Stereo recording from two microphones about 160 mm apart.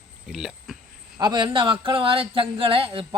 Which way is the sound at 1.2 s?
30° right (ahead or behind).